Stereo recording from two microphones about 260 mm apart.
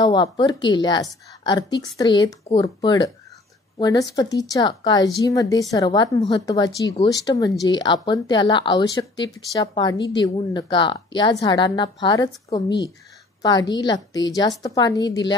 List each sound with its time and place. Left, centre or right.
0.0 s a woman's voice: centre